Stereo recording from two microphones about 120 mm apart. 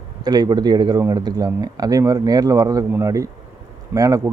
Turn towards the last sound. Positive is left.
turn(degrees=-30)  # may be behind; listen again after turning